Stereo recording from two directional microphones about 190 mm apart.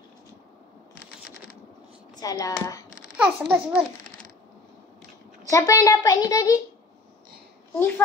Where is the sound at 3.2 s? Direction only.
5° right (ahead or behind).